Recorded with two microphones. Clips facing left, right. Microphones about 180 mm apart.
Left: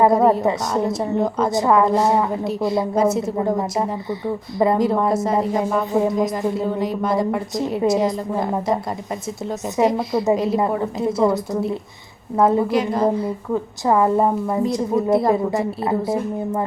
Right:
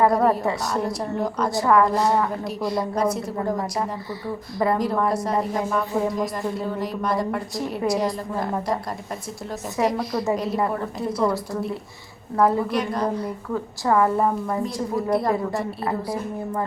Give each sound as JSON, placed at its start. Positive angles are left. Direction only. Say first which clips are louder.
{"t": 0.0, "sound": "a woman's voice", "louder": "left 4 dB", "side_deg": 20}
{"t": 6.3, "sound": "speech", "louder": "left 5 dB", "side_deg": 0}
{"t": 7.8, "sound": "a woman's voice", "louder": "left 4 dB", "side_deg": 25}